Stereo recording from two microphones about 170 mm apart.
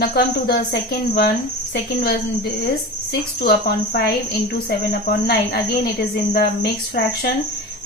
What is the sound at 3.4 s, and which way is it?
Speech, 70° left (ahead or behind).